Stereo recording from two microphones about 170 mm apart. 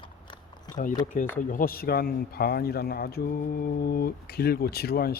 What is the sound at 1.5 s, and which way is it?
Speech, 60° left (ahead or behind).